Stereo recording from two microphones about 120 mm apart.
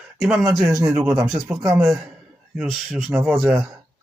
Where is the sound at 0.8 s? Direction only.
30° right (ahead or behind).